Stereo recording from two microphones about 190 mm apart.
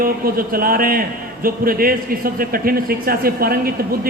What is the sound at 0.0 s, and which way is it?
A man's voice, 50° right (ahead or behind).